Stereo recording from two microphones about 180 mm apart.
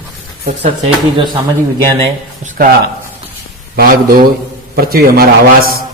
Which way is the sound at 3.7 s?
55° right (ahead or behind).